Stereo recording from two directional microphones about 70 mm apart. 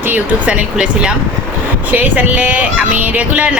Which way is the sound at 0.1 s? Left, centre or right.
Centre.